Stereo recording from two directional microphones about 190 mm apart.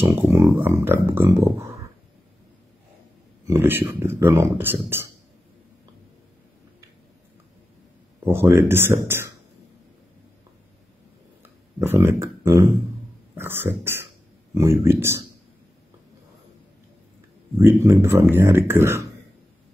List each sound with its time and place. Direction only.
0.1 s a sound: 15° right (ahead or behind)
1.4 s speech: 15° right (ahead or behind)
3.4 s speech: 10° right (ahead or behind)
8.3 s speech: 10° right (ahead or behind)
11.8 s speech: 10° right (ahead or behind)
17.6 s speech: 15° right (ahead or behind)